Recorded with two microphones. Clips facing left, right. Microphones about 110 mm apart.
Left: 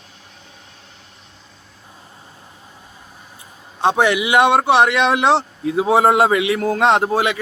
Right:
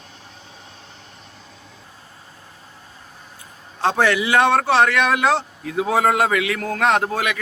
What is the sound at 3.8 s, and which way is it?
A man's voice, 15° left (ahead or behind).